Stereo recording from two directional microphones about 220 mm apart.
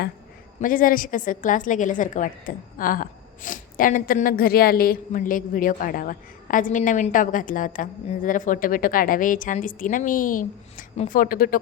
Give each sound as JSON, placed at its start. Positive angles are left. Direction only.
{"t": 0.6, "sound": "a woman's voice", "side_deg": 40}